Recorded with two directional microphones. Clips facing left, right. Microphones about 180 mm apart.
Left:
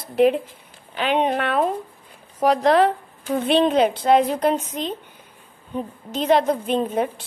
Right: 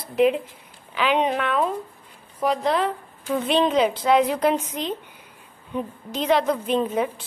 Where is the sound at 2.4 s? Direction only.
80° left.